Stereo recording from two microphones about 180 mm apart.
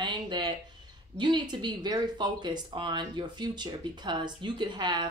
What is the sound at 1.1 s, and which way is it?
A woman's voice, 25° right (ahead or behind).